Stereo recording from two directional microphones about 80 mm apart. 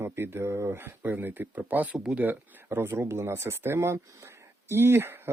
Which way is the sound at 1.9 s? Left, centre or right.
Centre.